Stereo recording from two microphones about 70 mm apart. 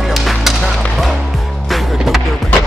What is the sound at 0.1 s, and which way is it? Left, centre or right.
Music, centre.